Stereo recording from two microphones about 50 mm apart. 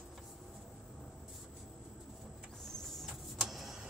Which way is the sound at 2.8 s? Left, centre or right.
Centre.